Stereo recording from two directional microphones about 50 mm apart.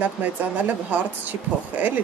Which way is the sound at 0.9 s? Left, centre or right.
Right.